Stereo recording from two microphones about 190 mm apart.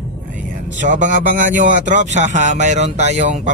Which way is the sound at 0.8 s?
40° right (ahead or behind).